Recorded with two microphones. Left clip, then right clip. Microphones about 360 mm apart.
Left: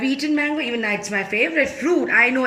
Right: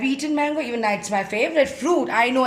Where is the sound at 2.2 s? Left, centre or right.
Right.